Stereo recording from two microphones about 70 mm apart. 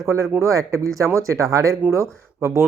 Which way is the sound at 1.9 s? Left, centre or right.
Right.